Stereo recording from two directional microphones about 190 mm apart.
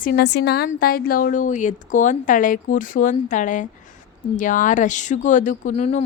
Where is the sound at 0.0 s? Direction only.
55° left (ahead or behind).